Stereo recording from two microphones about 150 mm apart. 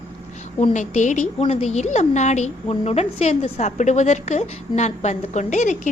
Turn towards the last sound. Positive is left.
turn(degrees=55)  # may be behind; listen again after turning